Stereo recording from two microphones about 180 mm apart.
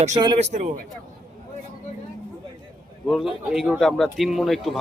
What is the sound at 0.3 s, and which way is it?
Speech, 40° right (ahead or behind).